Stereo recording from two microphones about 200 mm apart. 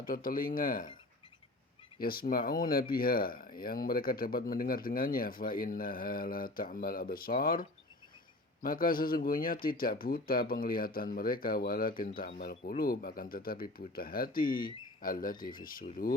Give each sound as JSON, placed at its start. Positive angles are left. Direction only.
{"t": 0.0, "sound": "speech", "side_deg": 45}
{"t": 2.0, "sound": "speech", "side_deg": 45}